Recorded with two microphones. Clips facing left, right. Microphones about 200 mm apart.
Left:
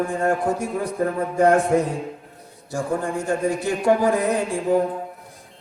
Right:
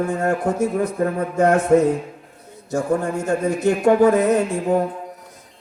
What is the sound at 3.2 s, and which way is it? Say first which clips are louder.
A man's voice: right 4 dB; 45° right (ahead or behind).